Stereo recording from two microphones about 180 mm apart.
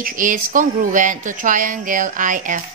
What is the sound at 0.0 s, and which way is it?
A woman's voice, 50° right (ahead or behind).